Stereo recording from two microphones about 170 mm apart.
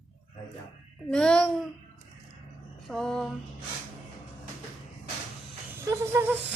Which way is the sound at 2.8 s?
Centre (ahead or behind).